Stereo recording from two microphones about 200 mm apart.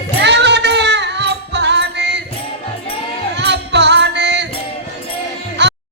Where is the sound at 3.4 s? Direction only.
60° right (ahead or behind).